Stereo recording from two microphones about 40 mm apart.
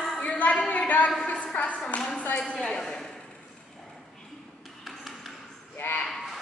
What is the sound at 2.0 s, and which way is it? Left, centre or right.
Speech, left.